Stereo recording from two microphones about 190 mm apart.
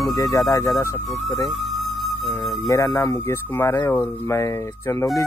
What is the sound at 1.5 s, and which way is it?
Music, centre (ahead or behind).